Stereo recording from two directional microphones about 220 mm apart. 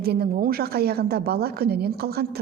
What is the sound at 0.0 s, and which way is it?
A woman's voice, 45° right (ahead or behind).